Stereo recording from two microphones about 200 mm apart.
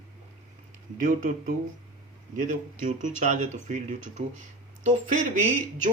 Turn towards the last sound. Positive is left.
turn(degrees=-40)  # may be behind; listen again after turning